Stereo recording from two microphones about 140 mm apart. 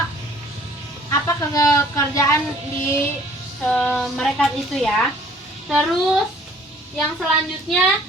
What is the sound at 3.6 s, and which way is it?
A woman's voice, 5° left (ahead or behind).